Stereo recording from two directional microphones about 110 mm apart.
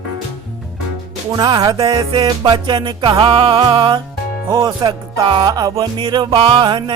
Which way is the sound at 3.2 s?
55° right (ahead or behind).